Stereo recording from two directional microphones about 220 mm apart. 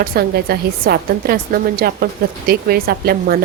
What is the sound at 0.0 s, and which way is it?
A woman's voice, 45° right (ahead or behind).